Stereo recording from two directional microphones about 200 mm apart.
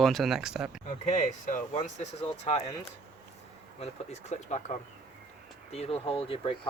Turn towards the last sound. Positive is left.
turn(degrees=30)  # may be behind; listen again after turning